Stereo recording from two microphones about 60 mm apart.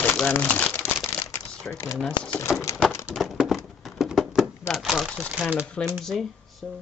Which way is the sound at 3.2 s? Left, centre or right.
Centre.